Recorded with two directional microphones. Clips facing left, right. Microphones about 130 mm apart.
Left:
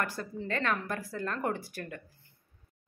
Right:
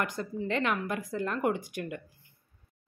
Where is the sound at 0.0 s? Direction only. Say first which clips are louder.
Right 2 dB; 20° right (ahead or behind).